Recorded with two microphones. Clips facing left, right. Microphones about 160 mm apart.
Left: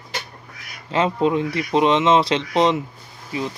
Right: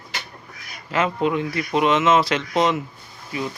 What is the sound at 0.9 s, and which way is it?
Speech, 25° left (ahead or behind).